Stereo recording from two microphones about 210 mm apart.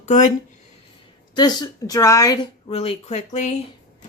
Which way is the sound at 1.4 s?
20° left (ahead or behind).